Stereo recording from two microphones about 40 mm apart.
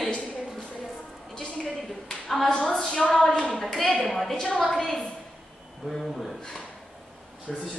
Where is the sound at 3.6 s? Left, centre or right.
Centre.